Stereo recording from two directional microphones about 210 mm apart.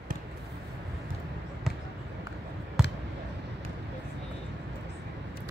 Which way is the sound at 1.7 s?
Centre (ahead or behind).